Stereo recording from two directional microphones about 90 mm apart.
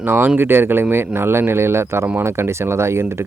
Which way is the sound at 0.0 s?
25° right (ahead or behind).